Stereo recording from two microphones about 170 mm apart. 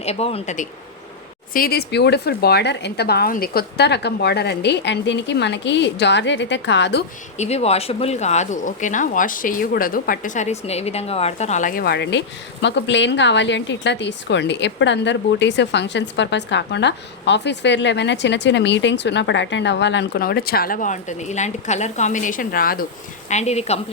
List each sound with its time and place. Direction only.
0.0 s speech: 35° left (ahead or behind)
1.5 s speech: 65° left (ahead or behind); by 7.0 s 90° left
7.3 s speech: 40° left (ahead or behind); by 12.2 s 80° left
12.6 s a woman's voice: 90° left; by 22.9 s 60° left (ahead or behind)
23.3 s speech: 40° left (ahead or behind)